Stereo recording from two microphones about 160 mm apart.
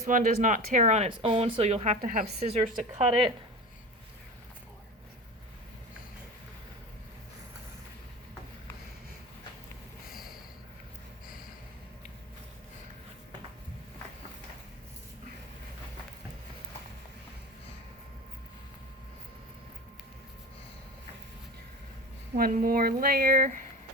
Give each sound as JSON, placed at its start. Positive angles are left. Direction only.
{"t": 0.0, "sound": "speech", "side_deg": -55}
{"t": 22.6, "sound": "speech", "side_deg": -65}